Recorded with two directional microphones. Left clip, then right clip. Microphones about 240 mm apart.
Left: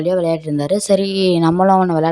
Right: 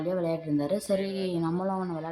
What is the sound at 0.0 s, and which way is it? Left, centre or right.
Speech, left.